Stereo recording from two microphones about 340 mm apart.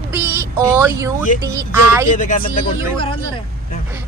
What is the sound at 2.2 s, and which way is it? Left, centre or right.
Speech, left.